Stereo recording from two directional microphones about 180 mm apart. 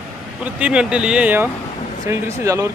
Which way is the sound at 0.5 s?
5° right (ahead or behind).